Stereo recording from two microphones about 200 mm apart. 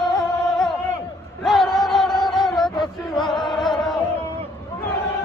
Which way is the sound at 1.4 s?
Centre (ahead or behind).